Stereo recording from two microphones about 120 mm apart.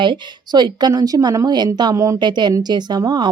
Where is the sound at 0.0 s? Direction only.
40° right (ahead or behind).